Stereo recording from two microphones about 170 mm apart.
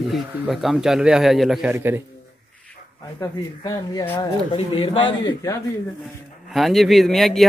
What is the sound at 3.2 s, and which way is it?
Speech, 20° left (ahead or behind).